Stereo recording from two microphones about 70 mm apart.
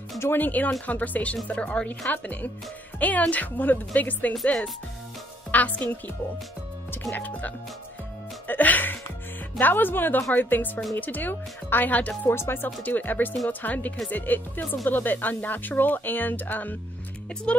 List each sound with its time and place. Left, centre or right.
0.2 s speech: left
5.5 s a woman's voice: left
7.2 s speech: left
8.5 s music: left
9.6 s speech: left
12.3 s speech: left
17.5 s speech: centre